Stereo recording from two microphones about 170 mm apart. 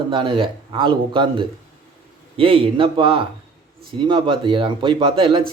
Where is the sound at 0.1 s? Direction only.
30° right (ahead or behind).